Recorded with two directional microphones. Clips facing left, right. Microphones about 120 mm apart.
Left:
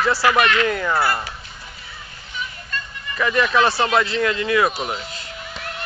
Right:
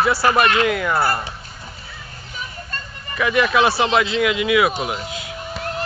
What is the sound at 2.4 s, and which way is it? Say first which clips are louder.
Music: left 2 dB; 40° right (ahead or behind).